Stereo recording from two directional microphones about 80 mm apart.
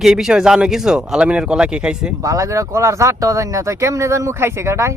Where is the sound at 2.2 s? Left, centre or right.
Right.